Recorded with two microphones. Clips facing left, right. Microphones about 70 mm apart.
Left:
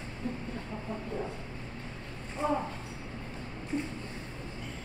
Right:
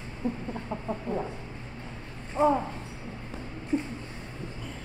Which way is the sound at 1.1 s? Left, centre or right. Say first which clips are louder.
Right 6 dB; right.